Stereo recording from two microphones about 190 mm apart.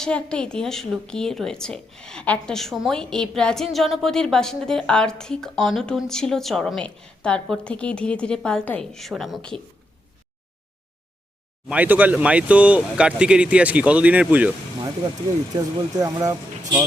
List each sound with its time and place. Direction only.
0.0 s a woman's voice: 5° left (ahead or behind)
11.7 s speech: 10° right (ahead or behind)
15.5 s speech: 20° right (ahead or behind)